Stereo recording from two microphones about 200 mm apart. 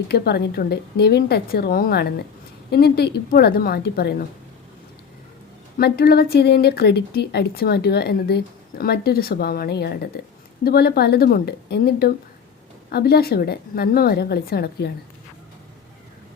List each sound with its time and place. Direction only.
0.1 s speech: 50° left (ahead or behind)
5.7 s speech: 50° left (ahead or behind)